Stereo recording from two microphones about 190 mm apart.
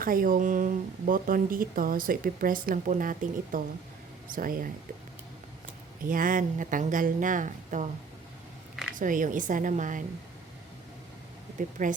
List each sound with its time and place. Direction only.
0.0 s speech: 50° right (ahead or behind)
6.1 s speech: 45° right (ahead or behind)
9.0 s speech: 45° right (ahead or behind)
11.8 s speech: 45° right (ahead or behind)